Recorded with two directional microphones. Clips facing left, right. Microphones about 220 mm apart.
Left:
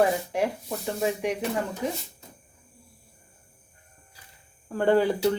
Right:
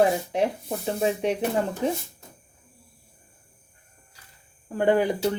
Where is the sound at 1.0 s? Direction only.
25° right (ahead or behind).